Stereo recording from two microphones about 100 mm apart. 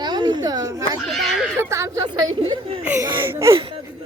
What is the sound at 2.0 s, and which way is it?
Speech, 45° right (ahead or behind).